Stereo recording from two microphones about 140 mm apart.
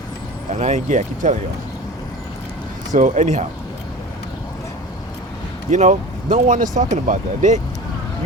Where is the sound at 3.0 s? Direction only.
65° right (ahead or behind).